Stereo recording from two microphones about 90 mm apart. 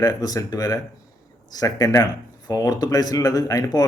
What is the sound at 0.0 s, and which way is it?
Speech, 40° left (ahead or behind).